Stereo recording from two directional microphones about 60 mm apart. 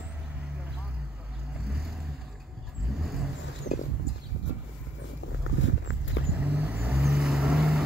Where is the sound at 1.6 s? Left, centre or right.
Centre.